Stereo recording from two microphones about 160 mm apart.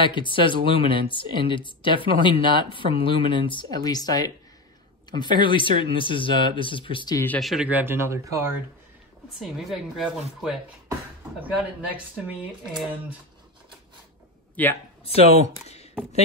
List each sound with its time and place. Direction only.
0.0 s speech: 30° left (ahead or behind)
7.3 s speech: centre (ahead or behind)
9.4 s speech: centre (ahead or behind)
14.5 s speech: 10° left (ahead or behind)
15.0 s speech: 40° left (ahead or behind)